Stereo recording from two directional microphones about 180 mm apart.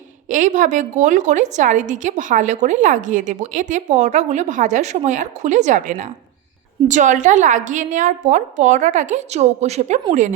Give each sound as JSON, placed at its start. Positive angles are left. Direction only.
{"t": 0.3, "sound": "a woman's voice", "side_deg": -45}